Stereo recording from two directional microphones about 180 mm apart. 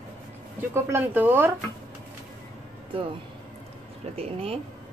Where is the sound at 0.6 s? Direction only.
15° right (ahead or behind).